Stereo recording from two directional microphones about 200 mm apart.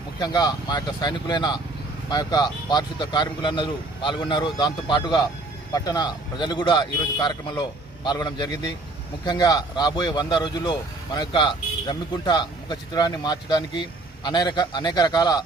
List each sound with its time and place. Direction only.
0.2 s speech: 20° left (ahead or behind)